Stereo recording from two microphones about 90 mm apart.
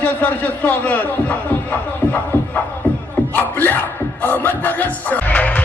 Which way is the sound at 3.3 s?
20° left (ahead or behind).